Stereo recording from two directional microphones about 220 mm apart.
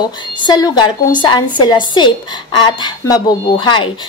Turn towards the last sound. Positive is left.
turn(degrees=20)  # may be behind; listen again after turning